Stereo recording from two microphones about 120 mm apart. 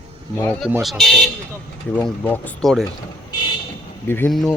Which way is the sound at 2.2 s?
15° left (ahead or behind).